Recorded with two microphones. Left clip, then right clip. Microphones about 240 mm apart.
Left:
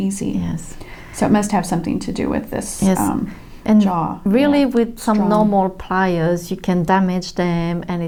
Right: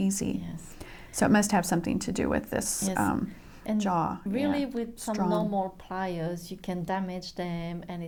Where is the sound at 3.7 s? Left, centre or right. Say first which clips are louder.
Left 9 dB; right.